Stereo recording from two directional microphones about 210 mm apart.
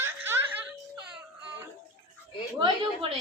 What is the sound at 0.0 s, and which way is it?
Laughter, 10° right (ahead or behind).